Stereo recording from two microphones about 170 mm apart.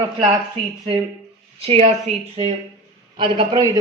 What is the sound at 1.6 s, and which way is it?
A man's voice, 35° right (ahead or behind).